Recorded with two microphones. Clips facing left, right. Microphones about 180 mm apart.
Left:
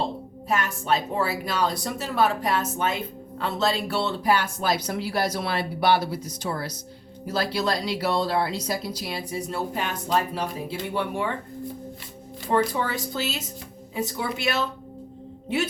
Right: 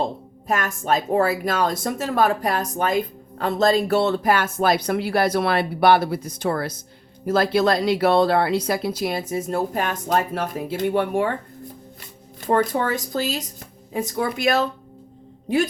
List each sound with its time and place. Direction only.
0.4 s speech: 45° right (ahead or behind)
12.5 s speech: 50° right (ahead or behind)